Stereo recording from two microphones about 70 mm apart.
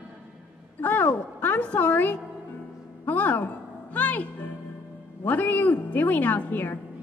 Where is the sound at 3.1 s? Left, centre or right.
Left.